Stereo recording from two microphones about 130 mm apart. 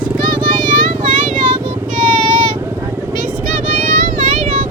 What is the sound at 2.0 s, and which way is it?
Vehicle, 90° right.